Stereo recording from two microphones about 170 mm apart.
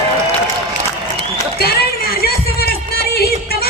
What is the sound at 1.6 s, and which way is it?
Music, 65° left (ahead or behind).